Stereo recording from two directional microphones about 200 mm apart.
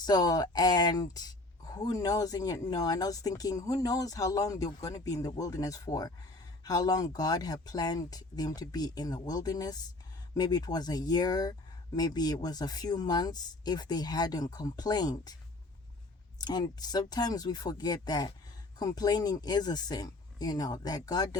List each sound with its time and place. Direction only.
0.0 s speech: 20° left (ahead or behind)
16.4 s speech: 20° left (ahead or behind)